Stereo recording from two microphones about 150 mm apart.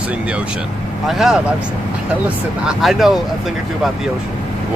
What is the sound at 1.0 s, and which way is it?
Speech, centre (ahead or behind).